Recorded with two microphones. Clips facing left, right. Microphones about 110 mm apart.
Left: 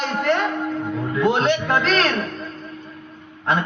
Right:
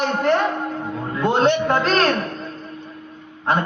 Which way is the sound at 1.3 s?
35° right (ahead or behind).